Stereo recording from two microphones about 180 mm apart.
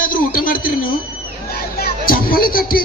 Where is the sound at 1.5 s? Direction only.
55° left (ahead or behind).